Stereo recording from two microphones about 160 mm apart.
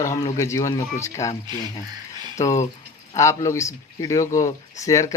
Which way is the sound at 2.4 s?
20° left (ahead or behind).